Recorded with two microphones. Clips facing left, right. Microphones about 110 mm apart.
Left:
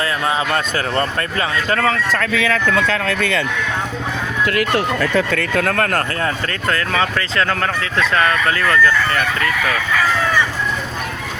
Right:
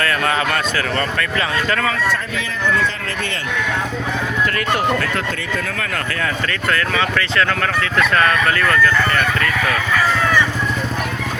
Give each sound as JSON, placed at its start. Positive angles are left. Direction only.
{"t": 0.5, "sound": "speech", "side_deg": 30}
{"t": 2.1, "sound": "speech", "side_deg": 85}
{"t": 5.4, "sound": "speech", "side_deg": 65}
{"t": 6.5, "sound": "speech", "side_deg": 30}